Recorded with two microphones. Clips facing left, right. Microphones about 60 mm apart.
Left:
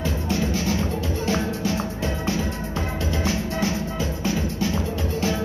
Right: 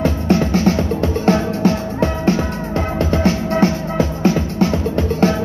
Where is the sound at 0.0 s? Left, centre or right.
Right.